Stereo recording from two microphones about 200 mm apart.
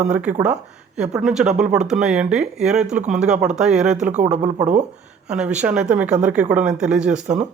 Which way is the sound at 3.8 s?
35° right (ahead or behind).